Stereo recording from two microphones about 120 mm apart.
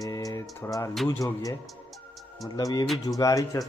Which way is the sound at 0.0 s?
30° left (ahead or behind).